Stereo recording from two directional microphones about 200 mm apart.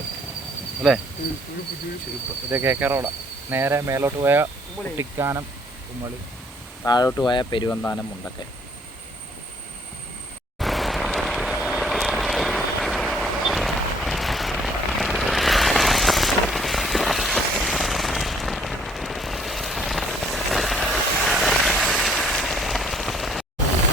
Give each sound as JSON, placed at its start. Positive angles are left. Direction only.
{"t": 0.8, "sound": "cricket", "side_deg": 0}
{"t": 2.5, "sound": "speech", "side_deg": -10}
{"t": 6.8, "sound": "speech", "side_deg": 20}
{"t": 7.7, "sound": "speech", "side_deg": 10}
{"t": 10.6, "sound": "vehicle", "side_deg": 0}